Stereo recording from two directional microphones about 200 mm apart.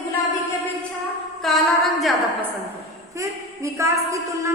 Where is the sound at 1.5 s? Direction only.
Centre (ahead or behind).